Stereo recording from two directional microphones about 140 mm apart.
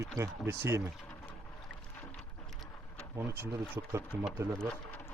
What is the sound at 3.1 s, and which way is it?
Speech, 15° right (ahead or behind).